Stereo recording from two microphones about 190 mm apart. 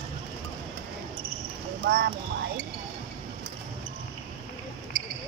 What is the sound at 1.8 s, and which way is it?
Clip-clop, 55° right (ahead or behind).